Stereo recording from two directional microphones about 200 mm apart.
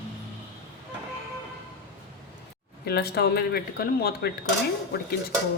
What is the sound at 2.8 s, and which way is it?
Speech, 55° left (ahead or behind).